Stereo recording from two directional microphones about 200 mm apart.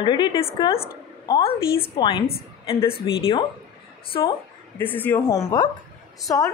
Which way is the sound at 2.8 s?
25° left (ahead or behind).